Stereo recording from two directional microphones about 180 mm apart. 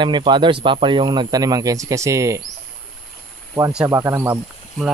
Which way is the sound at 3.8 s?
15° right (ahead or behind).